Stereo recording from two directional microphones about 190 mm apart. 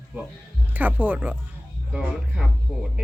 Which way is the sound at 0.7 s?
10° right (ahead or behind).